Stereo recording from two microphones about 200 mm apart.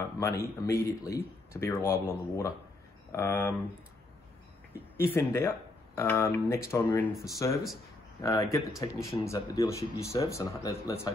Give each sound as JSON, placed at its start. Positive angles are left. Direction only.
{"t": 0.0, "sound": "speech", "side_deg": 15}
{"t": 4.9, "sound": "speech", "side_deg": 10}